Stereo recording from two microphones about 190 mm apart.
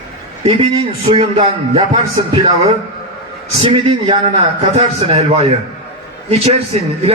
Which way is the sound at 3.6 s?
30° right (ahead or behind).